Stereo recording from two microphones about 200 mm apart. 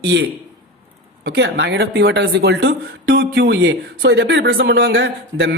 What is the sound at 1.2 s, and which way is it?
Speech, 55° right (ahead or behind).